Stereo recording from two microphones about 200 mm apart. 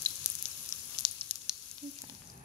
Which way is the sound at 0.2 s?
15° left (ahead or behind).